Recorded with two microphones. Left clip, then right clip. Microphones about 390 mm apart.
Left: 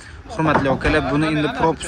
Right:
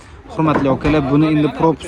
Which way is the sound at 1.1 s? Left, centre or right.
Right.